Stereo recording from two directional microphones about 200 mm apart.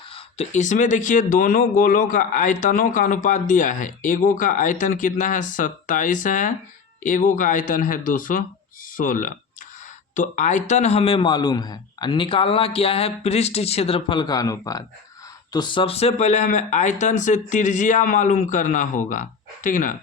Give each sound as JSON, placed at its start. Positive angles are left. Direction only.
{"t": 0.1, "sound": "a man's voice", "side_deg": 35}